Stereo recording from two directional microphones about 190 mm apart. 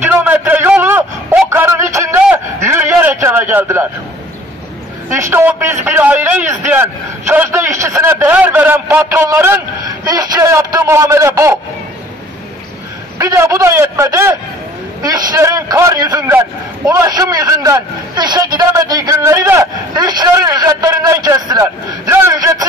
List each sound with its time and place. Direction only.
0.2 s a sound: 10° right (ahead or behind)
5.1 s a man's voice: 10° right (ahead or behind)
13.2 s a man's voice: 15° right (ahead or behind)